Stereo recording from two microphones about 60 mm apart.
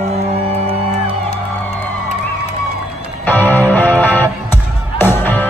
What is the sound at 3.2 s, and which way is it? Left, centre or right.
Music, left.